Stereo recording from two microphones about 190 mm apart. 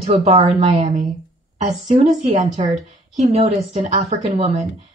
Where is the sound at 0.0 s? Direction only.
35° right (ahead or behind).